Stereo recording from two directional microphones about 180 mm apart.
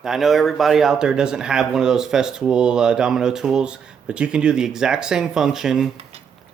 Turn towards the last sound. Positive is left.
turn(degrees=0)  # may be behind; listen again after turning